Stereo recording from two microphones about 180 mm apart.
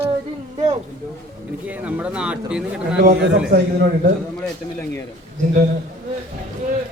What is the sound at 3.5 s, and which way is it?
Speech, 55° right (ahead or behind).